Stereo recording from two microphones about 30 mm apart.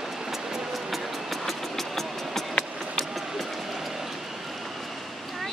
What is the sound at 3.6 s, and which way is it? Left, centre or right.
Train, centre.